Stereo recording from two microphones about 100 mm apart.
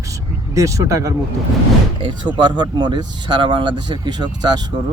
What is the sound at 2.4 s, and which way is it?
Speech, 50° right (ahead or behind).